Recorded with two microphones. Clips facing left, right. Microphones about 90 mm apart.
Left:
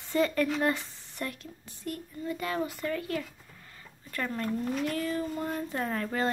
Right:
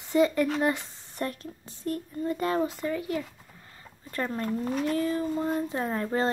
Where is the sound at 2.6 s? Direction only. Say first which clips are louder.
Right 3 dB; 20° right (ahead or behind).